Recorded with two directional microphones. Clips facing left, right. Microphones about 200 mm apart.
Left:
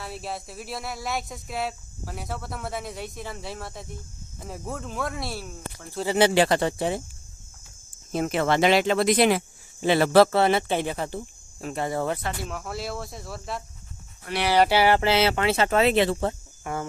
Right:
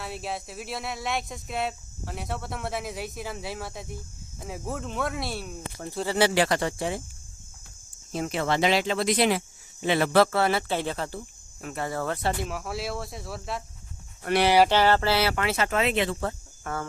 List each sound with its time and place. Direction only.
0.0 s speech: centre (ahead or behind)
6.1 s speech: 20° left (ahead or behind)
8.1 s speech: 60° left (ahead or behind)
9.8 s speech: 35° left (ahead or behind); by 12.2 s 20° left (ahead or behind)
12.5 s speech: centre (ahead or behind)
14.3 s speech: 60° right (ahead or behind)
14.7 s speech: 10° left (ahead or behind); by 16.3 s 35° left (ahead or behind)
16.7 s cricket: 15° left (ahead or behind)